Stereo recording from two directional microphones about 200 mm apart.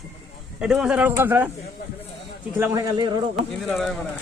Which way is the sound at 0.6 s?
5° right (ahead or behind).